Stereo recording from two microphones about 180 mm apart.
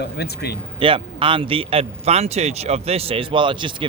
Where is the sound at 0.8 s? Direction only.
30° right (ahead or behind).